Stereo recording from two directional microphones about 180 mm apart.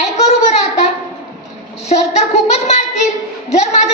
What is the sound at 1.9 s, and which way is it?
A child's voice, 35° left (ahead or behind).